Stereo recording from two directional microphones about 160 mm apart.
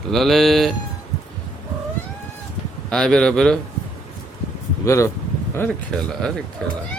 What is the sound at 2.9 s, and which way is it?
Speech, 5° left (ahead or behind).